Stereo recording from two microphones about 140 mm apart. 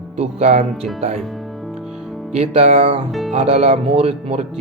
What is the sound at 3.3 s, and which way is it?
Speech, 50° right (ahead or behind).